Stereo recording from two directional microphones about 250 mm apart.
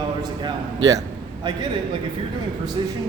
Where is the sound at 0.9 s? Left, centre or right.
Centre.